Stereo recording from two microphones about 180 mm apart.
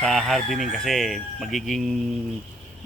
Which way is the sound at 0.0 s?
Centre (ahead or behind).